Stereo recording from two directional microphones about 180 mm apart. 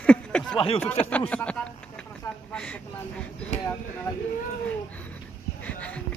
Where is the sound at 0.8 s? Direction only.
10° left (ahead or behind).